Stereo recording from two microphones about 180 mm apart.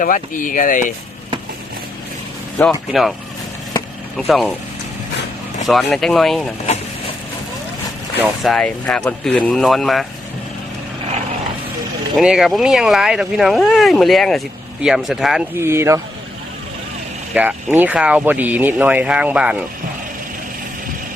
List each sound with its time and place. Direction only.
0.0 s speech: 45° left (ahead or behind)
2.9 s speech: centre (ahead or behind)
4.3 s speech: centre (ahead or behind)
5.6 s speech: centre (ahead or behind)
8.4 s speech: 5° left (ahead or behind)
12.1 s speech: 5° right (ahead or behind)
15.5 s speech: 15° right (ahead or behind)
17.3 s speech: 10° right (ahead or behind)